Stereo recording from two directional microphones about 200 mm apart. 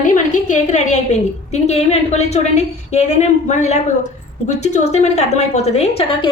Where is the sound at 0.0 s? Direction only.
40° left (ahead or behind).